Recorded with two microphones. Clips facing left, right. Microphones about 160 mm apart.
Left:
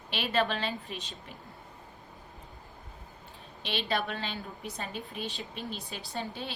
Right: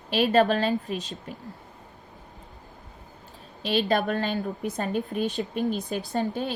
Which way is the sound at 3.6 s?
40° right (ahead or behind).